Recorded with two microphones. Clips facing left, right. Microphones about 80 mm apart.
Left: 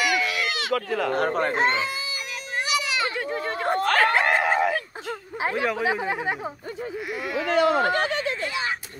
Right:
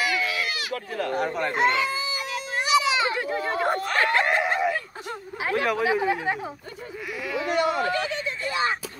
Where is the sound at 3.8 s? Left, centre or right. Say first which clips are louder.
Left 3 dB; left.